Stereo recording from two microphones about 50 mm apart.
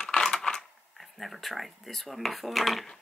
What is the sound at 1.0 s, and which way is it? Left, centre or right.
Speech, centre.